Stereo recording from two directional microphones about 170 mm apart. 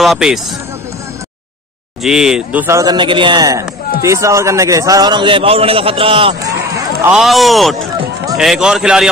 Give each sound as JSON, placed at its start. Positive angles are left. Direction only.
{"t": 0.0, "sound": "a man's voice", "side_deg": 0}
{"t": 2.0, "sound": "a man's voice", "side_deg": -5}
{"t": 2.6, "sound": "a man's voice", "side_deg": -20}
{"t": 7.1, "sound": "a man's voice", "side_deg": 0}